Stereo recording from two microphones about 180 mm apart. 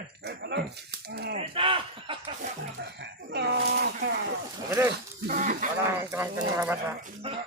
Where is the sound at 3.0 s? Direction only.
70° right (ahead or behind).